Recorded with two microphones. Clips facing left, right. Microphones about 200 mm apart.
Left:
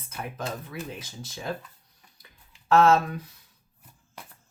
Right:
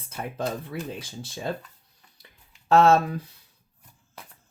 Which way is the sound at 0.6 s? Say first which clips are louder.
Right 3 dB; 30° right (ahead or behind).